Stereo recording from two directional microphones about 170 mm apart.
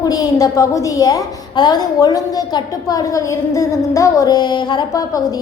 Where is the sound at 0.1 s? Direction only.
20° left (ahead or behind).